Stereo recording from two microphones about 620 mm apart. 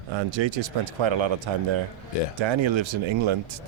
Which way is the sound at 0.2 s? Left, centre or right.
Right.